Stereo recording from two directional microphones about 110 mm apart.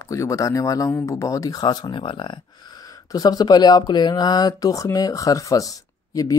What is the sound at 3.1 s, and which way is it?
Speech, 35° left (ahead or behind).